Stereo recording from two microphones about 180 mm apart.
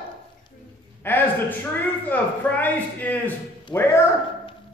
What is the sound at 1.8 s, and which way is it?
A man's voice, 10° left (ahead or behind).